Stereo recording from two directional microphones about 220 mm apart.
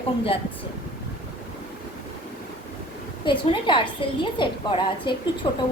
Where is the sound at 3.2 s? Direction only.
20° left (ahead or behind).